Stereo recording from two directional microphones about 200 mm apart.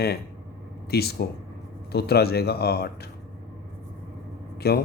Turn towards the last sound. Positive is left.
turn(degrees=50)  # may be behind; listen again after turning